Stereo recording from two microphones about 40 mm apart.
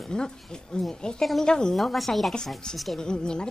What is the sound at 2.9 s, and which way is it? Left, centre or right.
Speech, centre.